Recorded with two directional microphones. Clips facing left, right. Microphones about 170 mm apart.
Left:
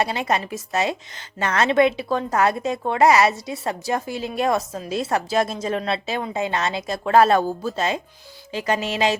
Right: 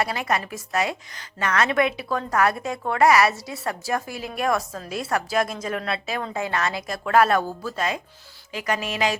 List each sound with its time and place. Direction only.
0.0 s a woman's voice: 25° left (ahead or behind)